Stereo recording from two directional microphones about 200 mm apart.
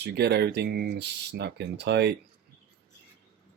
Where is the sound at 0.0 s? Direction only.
55° right (ahead or behind).